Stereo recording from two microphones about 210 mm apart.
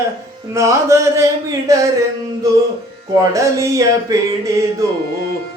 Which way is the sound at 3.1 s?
15° right (ahead or behind).